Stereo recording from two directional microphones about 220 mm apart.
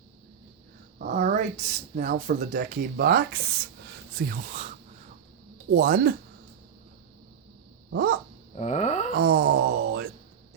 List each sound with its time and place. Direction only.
0.9 s speech: 35° right (ahead or behind)
5.7 s speech: 40° right (ahead or behind)
7.9 s dog: 45° right (ahead or behind)
8.5 s a sound: 30° left (ahead or behind)
9.1 s groan: 45° right (ahead or behind)